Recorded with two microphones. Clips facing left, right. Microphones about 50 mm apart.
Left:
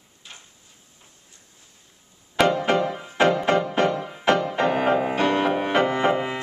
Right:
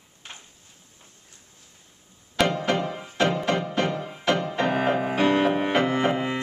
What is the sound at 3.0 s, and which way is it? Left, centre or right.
Music, left.